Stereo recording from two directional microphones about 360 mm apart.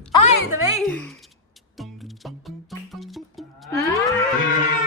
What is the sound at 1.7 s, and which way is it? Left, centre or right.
Music, centre.